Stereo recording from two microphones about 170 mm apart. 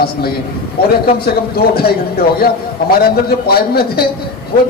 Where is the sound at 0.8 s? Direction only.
65° left (ahead or behind).